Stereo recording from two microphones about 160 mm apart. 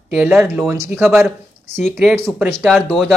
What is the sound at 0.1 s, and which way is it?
Speech, 10° right (ahead or behind).